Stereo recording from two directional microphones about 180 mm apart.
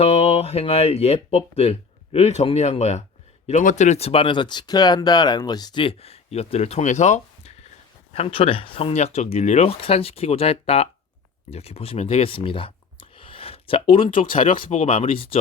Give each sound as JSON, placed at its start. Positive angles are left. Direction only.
{"t": 0.0, "sound": "speech", "side_deg": 35}